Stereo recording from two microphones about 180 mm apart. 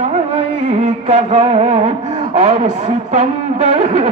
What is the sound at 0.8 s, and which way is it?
Speech, 40° right (ahead or behind).